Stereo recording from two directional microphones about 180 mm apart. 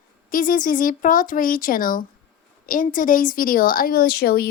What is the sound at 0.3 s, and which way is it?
Speech, 50° left (ahead or behind).